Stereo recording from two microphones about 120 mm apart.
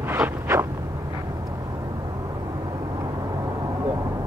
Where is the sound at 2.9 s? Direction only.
30° right (ahead or behind).